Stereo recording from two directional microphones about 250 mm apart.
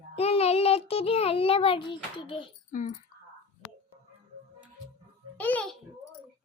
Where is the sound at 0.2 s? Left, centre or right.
Left.